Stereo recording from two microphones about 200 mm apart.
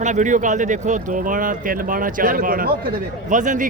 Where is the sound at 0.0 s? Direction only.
40° right (ahead or behind).